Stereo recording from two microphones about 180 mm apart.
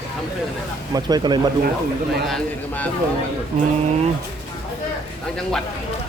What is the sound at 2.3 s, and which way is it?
Speech, 10° left (ahead or behind).